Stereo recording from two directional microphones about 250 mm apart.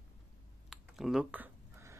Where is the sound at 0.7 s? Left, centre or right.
Centre.